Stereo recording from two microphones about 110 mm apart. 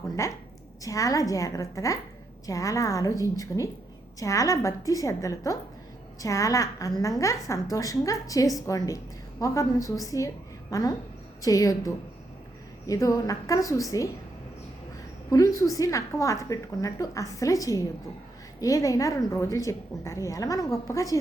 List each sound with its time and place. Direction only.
0.2 s a woman's voice: 30° left (ahead or behind)
15.3 s a woman's voice: 35° left (ahead or behind)